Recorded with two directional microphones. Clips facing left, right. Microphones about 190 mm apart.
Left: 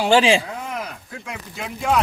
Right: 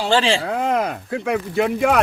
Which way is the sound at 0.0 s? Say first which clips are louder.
Left 2 dB; 15° left (ahead or behind).